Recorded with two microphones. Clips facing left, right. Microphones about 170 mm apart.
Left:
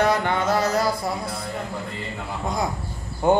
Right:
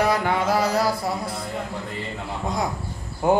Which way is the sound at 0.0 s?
5° right (ahead or behind).